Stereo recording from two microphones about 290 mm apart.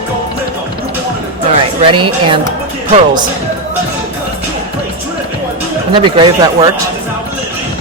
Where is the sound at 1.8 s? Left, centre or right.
Centre.